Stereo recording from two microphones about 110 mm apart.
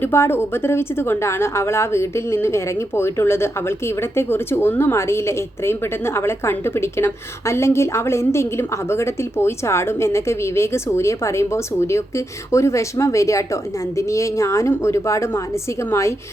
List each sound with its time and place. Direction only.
0.0 s a woman's voice: 20° left (ahead or behind)